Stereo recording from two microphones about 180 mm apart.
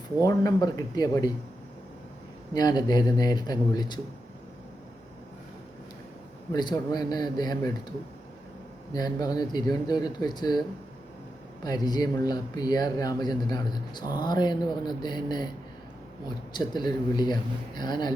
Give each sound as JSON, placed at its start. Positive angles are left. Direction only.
{"t": 0.3, "sound": "speech", "side_deg": 20}
{"t": 2.5, "sound": "speech", "side_deg": 20}
{"t": 6.5, "sound": "speech", "side_deg": 25}
{"t": 8.9, "sound": "speech", "side_deg": 20}
{"t": 11.6, "sound": "speech", "side_deg": 20}